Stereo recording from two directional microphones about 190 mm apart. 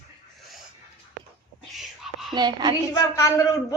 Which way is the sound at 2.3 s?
20° right (ahead or behind).